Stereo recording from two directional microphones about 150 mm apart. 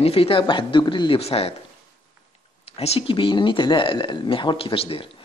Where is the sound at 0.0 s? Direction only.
40° left (ahead or behind).